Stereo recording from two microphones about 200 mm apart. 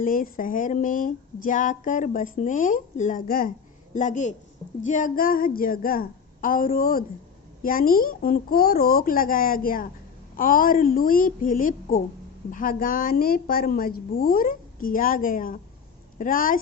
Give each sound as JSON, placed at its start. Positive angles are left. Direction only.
{"t": 0.0, "sound": "a woman's voice", "side_deg": 45}